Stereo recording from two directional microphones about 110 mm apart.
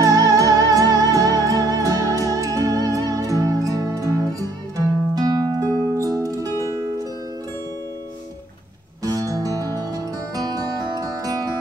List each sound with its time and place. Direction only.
0.0 s music: 30° right (ahead or behind)
9.0 s music: 35° right (ahead or behind)